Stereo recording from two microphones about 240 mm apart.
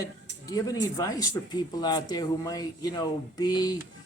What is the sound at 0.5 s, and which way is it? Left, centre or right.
Speech, centre.